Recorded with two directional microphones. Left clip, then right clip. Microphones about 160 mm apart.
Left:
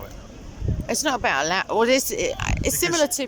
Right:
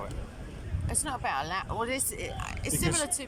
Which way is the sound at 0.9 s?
60° left (ahead or behind).